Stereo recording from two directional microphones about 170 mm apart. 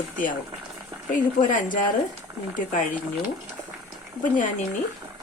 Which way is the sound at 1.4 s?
50° left (ahead or behind).